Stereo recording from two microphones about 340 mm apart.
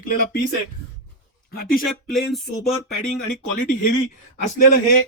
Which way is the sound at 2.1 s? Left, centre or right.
Centre.